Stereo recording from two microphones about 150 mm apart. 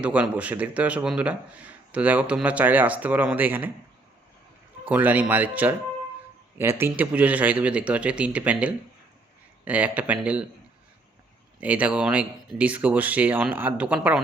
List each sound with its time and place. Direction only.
0.0 s a man's voice: 10° right (ahead or behind)
4.9 s a man's voice: 10° right (ahead or behind)
11.6 s a man's voice: 10° right (ahead or behind)